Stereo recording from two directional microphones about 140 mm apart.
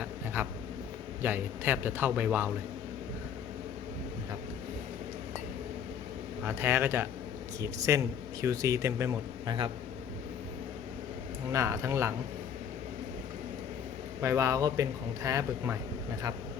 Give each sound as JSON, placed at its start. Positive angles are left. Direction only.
{"t": 0.4, "sound": "a man's voice", "side_deg": -15}
{"t": 6.4, "sound": "a man's voice", "side_deg": -15}
{"t": 11.5, "sound": "a man's voice", "side_deg": -20}
{"t": 14.2, "sound": "a man's voice", "side_deg": -20}